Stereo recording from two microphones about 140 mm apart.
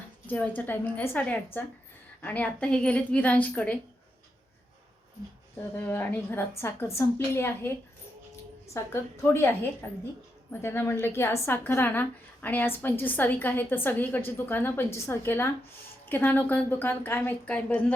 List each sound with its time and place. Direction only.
0.3 s a woman's voice: 10° left (ahead or behind)
5.7 s a woman's voice: 15° left (ahead or behind)
8.7 s a woman's voice: 15° left (ahead or behind)